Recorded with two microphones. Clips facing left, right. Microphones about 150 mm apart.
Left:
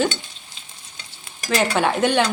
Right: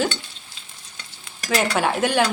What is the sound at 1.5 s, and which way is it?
Speech, 5° right (ahead or behind).